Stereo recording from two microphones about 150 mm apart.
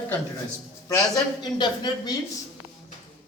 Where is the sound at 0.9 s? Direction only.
25° left (ahead or behind).